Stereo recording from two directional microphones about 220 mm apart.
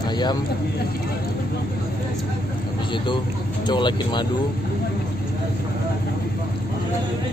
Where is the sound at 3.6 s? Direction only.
20° left (ahead or behind).